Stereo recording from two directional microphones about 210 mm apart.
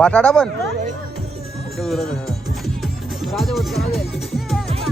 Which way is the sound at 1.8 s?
Centre (ahead or behind).